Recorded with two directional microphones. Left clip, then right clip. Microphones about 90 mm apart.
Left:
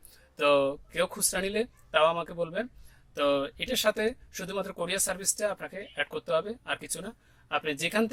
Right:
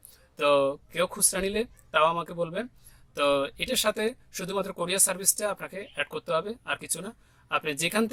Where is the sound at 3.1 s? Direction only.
45° right (ahead or behind).